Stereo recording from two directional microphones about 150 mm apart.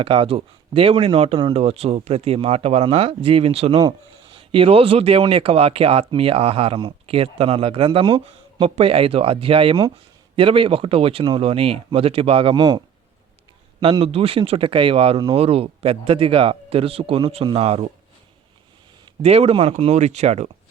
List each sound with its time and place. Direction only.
0.0 s speech: 35° right (ahead or behind)
3.8 s speech: 30° right (ahead or behind)
14.0 s speech: 40° right (ahead or behind)
19.2 s speech: 40° right (ahead or behind)